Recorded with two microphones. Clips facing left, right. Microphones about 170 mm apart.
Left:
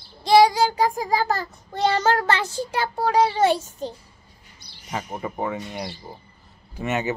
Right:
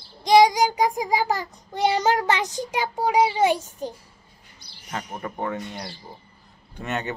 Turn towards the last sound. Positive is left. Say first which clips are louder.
# left 4 dB
turn(degrees=5)  # may be behind; listen again after turning